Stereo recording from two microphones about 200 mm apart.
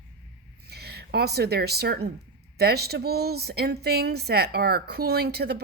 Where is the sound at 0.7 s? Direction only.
55° right (ahead or behind).